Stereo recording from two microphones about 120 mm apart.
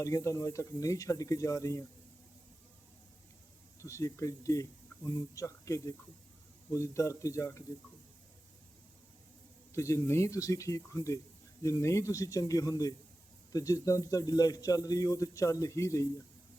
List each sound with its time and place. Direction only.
0.0 s speech: 25° left (ahead or behind)
3.8 s speech: 25° left (ahead or behind)
9.7 s speech: 25° left (ahead or behind)